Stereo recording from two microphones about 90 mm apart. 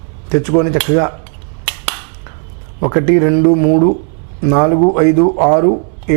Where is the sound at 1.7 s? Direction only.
15° right (ahead or behind).